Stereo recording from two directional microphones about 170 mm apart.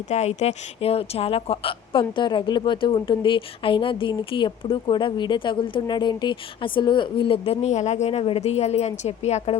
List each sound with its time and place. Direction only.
0.1 s a woman's voice: 40° left (ahead or behind)